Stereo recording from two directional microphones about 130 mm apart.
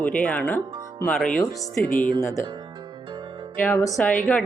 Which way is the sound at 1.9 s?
90° left.